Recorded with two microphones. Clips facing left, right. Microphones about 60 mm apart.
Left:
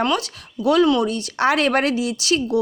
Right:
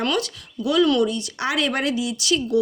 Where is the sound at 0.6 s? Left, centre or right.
Left.